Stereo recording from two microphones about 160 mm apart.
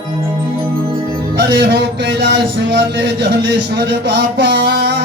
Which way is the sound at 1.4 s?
90° right.